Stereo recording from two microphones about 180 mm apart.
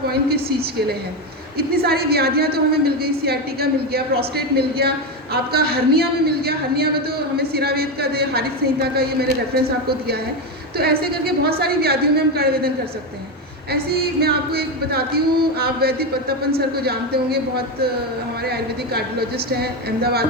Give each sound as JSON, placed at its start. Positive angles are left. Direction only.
{"t": 0.1, "sound": "a woman's voice", "side_deg": -60}
{"t": 10.8, "sound": "a woman's voice", "side_deg": -60}